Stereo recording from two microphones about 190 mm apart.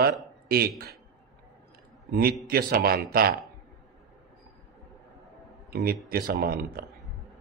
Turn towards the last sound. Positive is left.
turn(degrees=-50)  # may be behind; listen again after turning